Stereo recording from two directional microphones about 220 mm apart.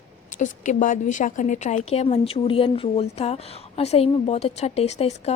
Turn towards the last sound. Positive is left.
turn(degrees=30)  # may be behind; listen again after turning